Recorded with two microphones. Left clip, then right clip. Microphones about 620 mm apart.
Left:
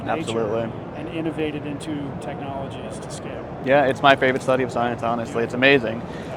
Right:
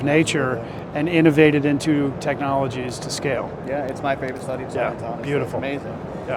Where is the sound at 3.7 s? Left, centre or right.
Left.